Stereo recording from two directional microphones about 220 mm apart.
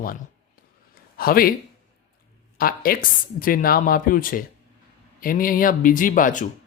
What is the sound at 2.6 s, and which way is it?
Speech, 40° left (ahead or behind).